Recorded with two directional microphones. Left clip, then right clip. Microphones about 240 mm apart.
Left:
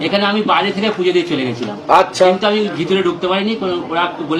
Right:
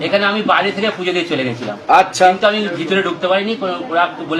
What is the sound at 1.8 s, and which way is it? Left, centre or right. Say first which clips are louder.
Speech: even; right.